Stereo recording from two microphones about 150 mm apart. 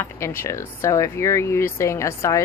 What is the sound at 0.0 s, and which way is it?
Speech, 15° left (ahead or behind).